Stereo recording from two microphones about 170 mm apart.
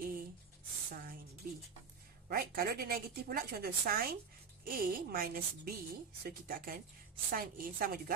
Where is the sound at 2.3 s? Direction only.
60° right (ahead or behind).